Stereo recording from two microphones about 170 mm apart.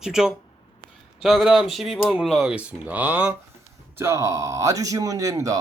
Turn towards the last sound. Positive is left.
turn(degrees=-20)  # may be behind; listen again after turning